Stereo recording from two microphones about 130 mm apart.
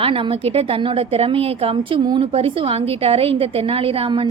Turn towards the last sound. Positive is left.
turn(degrees=-40)  # may be behind; listen again after turning